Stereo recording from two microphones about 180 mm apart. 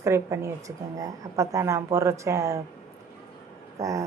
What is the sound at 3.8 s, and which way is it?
Speech, 15° right (ahead or behind).